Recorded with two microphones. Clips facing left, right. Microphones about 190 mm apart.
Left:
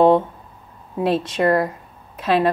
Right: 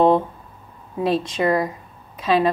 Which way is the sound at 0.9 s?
5° left (ahead or behind).